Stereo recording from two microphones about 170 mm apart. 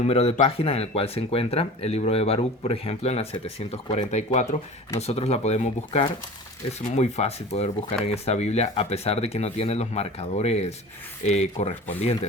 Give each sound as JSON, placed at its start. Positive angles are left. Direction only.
{"t": 0.0, "sound": "speech", "side_deg": 35}